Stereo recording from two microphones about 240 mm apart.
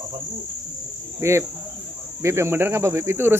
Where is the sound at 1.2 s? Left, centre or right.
Centre.